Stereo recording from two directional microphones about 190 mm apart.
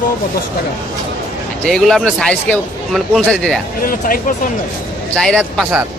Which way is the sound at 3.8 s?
50° left (ahead or behind).